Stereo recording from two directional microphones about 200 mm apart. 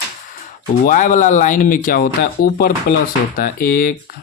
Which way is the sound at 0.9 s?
40° left (ahead or behind).